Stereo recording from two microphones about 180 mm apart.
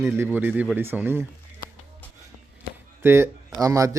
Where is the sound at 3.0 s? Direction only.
15° right (ahead or behind).